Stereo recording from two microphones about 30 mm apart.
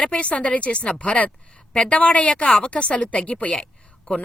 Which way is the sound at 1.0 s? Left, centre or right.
Left.